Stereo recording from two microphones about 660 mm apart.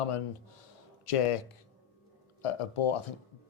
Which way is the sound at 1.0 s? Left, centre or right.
Left.